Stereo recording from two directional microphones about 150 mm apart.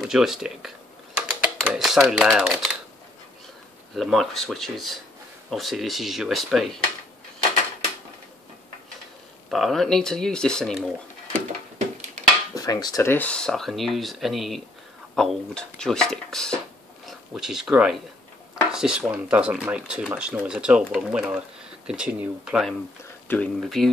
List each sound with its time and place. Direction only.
0.1 s speech: 5° right (ahead or behind)
3.9 s speech: centre (ahead or behind)
9.5 s speech: centre (ahead or behind)
12.2 s dishes: 55° right (ahead or behind)
12.5 s speech: 25° left (ahead or behind); by 22.8 s 5° right (ahead or behind)
23.2 s speech: 10° left (ahead or behind)